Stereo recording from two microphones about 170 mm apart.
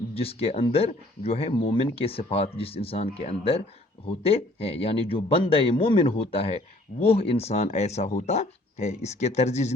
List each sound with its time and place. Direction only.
0.1 s speech: 35° left (ahead or behind)